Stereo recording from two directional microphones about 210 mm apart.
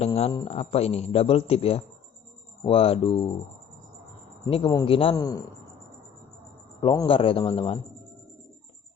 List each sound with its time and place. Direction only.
0.0 s speech: 30° left (ahead or behind)
4.4 s speech: 25° left (ahead or behind)
6.8 s speech: 25° left (ahead or behind)